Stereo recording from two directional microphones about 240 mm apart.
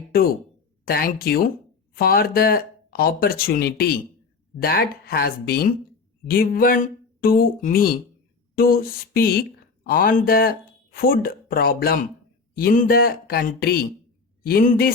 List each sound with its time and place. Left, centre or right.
0.1 s speech: left